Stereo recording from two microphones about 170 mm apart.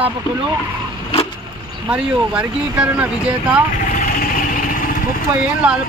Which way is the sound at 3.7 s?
55° left (ahead or behind).